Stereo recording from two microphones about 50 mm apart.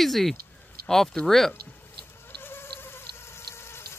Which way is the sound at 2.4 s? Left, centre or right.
Left.